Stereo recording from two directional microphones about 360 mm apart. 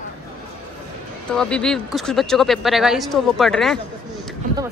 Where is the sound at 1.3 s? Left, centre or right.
Centre.